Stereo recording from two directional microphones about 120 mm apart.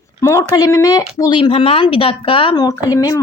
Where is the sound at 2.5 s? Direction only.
30° left (ahead or behind).